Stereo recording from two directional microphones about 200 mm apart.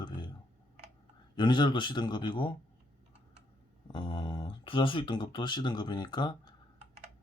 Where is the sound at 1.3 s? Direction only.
25° left (ahead or behind).